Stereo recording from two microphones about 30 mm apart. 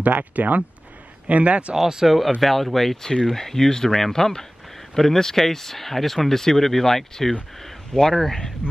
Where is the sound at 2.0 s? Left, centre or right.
Centre.